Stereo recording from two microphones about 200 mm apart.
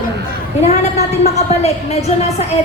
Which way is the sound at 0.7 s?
35° left (ahead or behind).